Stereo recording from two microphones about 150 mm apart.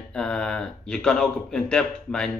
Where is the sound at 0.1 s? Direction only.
5° left (ahead or behind).